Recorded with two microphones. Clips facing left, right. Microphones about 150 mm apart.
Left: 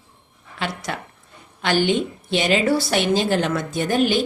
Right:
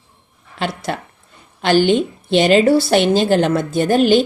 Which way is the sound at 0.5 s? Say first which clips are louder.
Right 5 dB; 30° right (ahead or behind).